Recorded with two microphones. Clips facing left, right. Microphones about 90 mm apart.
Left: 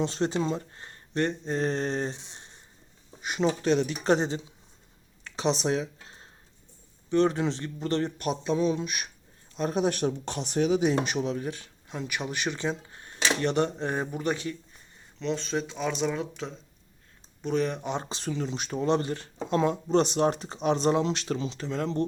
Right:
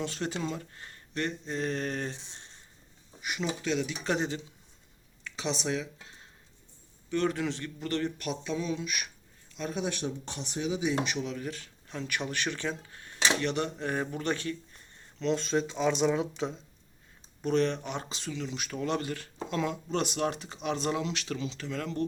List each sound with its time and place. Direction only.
0.0 s speech: 25° left (ahead or behind)
3.2 s speech: 35° left (ahead or behind)
4.0 s speech: 35° left (ahead or behind); by 10.9 s 60° left (ahead or behind)
11.0 s speech: 35° left (ahead or behind); by 14.8 s 10° left (ahead or behind)
15.2 s speech: centre (ahead or behind)
17.4 s speech: 5° left (ahead or behind)
17.8 s speech: 25° left (ahead or behind)